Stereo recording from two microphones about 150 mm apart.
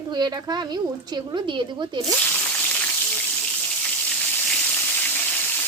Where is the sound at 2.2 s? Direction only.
10° left (ahead or behind).